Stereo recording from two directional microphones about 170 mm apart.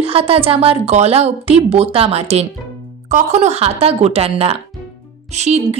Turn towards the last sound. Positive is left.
turn(degrees=-40)  # may be behind; listen again after turning